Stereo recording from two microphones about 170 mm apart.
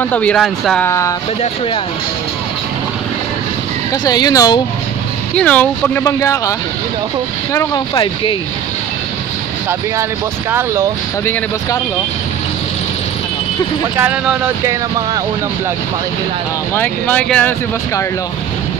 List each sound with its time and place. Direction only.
0.0 s speech: 10° left (ahead or behind)
0.8 s speech: 15° left (ahead or behind)
3.9 s speech: 25° left (ahead or behind)
5.3 s speech: 5° left (ahead or behind)
6.0 s speech: 20° left (ahead or behind)
7.5 s speech: 25° left (ahead or behind)
10.5 s speech: 15° right (ahead or behind)
16.7 s speech: 10° left (ahead or behind)